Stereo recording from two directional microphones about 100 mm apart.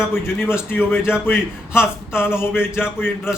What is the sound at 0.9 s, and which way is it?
Speech, 20° left (ahead or behind).